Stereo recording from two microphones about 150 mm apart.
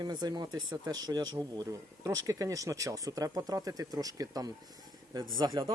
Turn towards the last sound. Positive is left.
turn(degrees=-30)  # may be behind; listen again after turning